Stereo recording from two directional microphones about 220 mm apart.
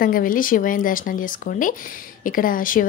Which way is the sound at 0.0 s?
40° left (ahead or behind).